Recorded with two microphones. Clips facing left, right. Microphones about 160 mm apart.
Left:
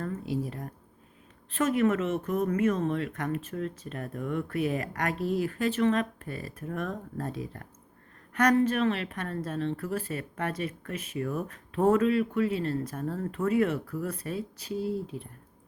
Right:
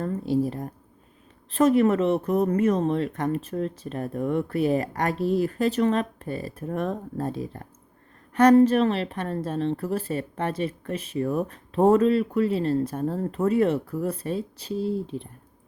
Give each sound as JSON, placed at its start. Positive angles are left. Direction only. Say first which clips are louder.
{"t": 0.0, "sound": "speech", "louder": "right 8 dB", "side_deg": -30}